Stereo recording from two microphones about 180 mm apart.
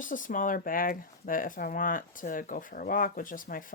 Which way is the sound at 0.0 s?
45° left (ahead or behind).